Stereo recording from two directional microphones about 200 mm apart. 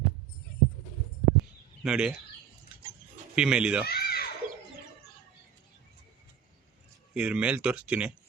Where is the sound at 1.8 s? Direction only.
5° right (ahead or behind).